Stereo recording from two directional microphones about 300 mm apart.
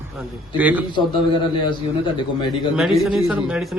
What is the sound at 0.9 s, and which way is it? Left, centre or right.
Speech, centre.